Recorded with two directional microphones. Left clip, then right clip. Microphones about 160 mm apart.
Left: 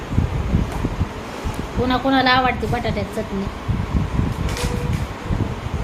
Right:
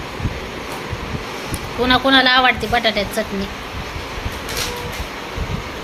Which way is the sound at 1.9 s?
Centre (ahead or behind).